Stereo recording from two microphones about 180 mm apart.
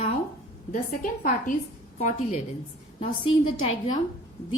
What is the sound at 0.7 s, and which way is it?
A woman's voice, 45° left (ahead or behind).